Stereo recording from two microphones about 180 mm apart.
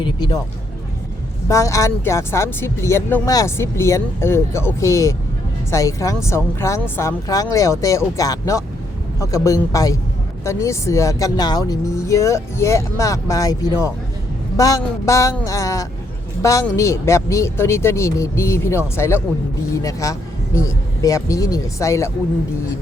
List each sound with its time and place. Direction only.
0.0 s a man's voice: 25° left (ahead or behind)
1.5 s a man's voice: 15° left (ahead or behind)